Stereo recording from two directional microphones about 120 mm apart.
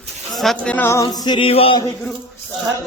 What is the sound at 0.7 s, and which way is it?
Speech, 20° left (ahead or behind).